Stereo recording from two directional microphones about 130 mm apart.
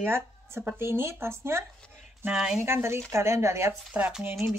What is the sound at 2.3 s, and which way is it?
Speech, 5° right (ahead or behind).